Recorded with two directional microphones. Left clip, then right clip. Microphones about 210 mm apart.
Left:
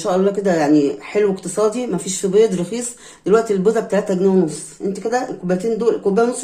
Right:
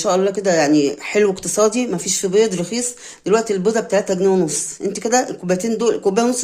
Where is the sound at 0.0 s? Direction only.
25° right (ahead or behind).